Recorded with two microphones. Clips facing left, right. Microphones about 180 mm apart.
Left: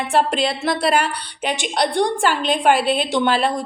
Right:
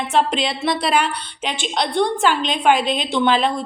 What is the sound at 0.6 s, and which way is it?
A woman's voice, 5° left (ahead or behind).